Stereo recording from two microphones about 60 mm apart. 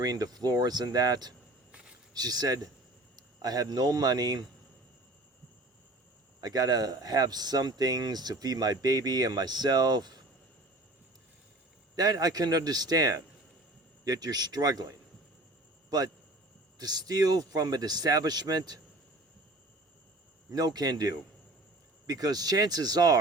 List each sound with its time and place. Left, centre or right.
0.0 s speech: right
2.2 s speech: right
6.4 s speech: right
11.9 s speech: right
16.7 s speech: right
20.5 s speech: right